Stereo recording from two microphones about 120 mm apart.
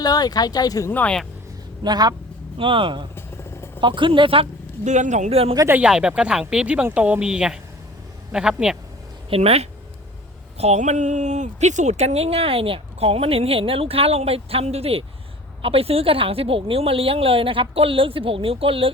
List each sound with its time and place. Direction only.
0.0 s speech: 35° left (ahead or behind)
0.9 s speech: 10° left (ahead or behind)
1.8 s speech: 35° right (ahead or behind)
2.6 s speech: 45° right (ahead or behind)
4.9 s a man's voice: 80° right; by 5.5 s 55° right (ahead or behind)
5.5 s speech: 20° right (ahead or behind)
5.8 s speech: 5° right (ahead or behind)
9.3 s speech: 55° right (ahead or behind)
10.6 s speech: 70° right (ahead or behind); by 18.9 s 50° right (ahead or behind)